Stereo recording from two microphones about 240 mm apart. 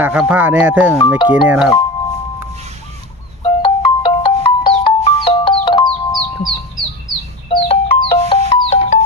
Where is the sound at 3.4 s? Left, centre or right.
Left.